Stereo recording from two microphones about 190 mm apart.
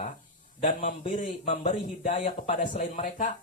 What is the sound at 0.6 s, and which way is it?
A man's voice, 40° left (ahead or behind).